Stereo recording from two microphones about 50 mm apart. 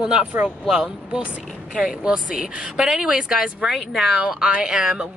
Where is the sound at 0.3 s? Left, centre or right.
Right.